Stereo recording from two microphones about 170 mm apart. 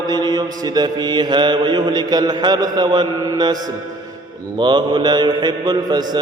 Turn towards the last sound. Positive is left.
turn(degrees=-25)  # may be behind; listen again after turning